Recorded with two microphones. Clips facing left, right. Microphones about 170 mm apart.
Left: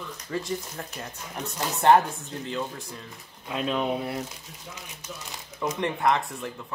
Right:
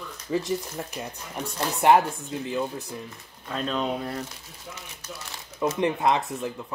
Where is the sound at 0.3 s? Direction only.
15° right (ahead or behind).